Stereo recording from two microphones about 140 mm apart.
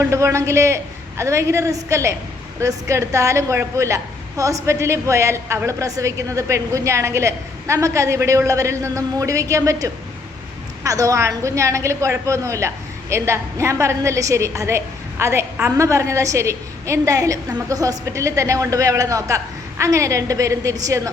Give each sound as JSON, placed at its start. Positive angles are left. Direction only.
{"t": 0.0, "sound": "a woman's voice", "side_deg": -20}